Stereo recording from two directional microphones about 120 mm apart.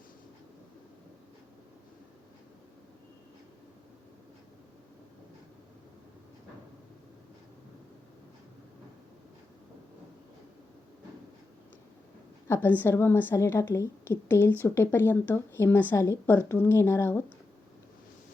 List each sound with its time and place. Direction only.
12.5 s a woman's voice: 15° left (ahead or behind)